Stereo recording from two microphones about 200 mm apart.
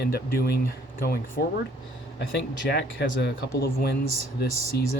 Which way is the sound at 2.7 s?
55° left (ahead or behind).